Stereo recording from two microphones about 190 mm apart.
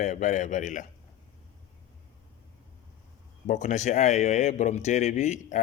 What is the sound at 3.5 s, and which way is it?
Speech, 40° left (ahead or behind).